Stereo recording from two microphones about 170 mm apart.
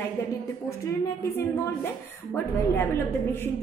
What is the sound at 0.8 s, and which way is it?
A woman's voice, 15° left (ahead or behind).